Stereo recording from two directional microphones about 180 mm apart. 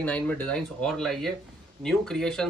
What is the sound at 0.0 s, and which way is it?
Speech, 10° left (ahead or behind).